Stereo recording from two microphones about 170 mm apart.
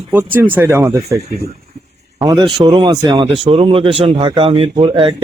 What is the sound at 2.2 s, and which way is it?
A man's voice, 20° right (ahead or behind).